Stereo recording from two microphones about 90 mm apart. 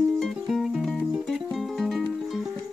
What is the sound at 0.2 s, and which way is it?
Music, 5° right (ahead or behind).